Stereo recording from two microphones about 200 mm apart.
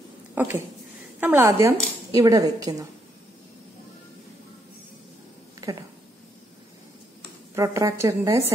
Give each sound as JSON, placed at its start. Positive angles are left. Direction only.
{"t": 0.3, "sound": "speech", "side_deg": -10}
{"t": 7.5, "sound": "speech", "side_deg": -15}